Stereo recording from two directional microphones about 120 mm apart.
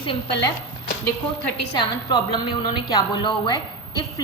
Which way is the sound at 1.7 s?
35° left (ahead or behind).